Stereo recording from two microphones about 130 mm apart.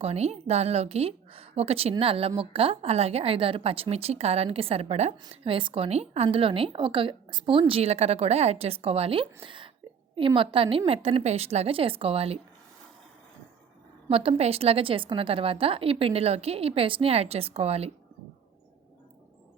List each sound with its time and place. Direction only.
0.0 s a woman's voice: 55° right (ahead or behind)
5.3 s a woman's voice: 45° right (ahead or behind)
7.7 s a woman's voice: 50° right (ahead or behind)
14.1 s a woman's voice: 50° right (ahead or behind)